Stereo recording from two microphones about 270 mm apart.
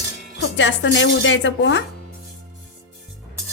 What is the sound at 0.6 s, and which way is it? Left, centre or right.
Speech, left.